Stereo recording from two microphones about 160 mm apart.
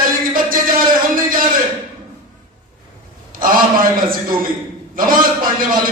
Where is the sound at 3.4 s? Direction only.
60° right (ahead or behind).